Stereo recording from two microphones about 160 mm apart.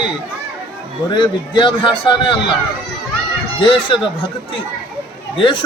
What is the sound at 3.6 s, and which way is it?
Speech, 30° left (ahead or behind).